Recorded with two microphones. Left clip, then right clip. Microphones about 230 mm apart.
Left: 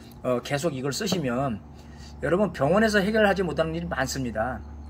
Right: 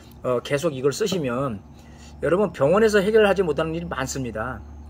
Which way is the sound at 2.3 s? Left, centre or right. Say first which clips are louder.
Right 3 dB; right.